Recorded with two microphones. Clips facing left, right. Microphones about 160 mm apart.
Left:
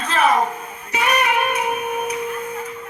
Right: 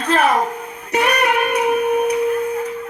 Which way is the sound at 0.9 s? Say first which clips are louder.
Right 3 dB; 65° right (ahead or behind).